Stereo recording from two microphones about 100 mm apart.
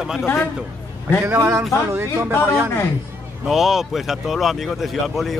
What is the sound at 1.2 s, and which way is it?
Speech, 25° right (ahead or behind).